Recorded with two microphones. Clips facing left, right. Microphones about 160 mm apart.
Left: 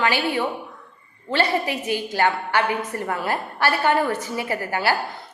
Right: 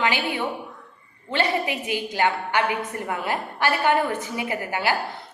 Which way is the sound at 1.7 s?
15° right (ahead or behind).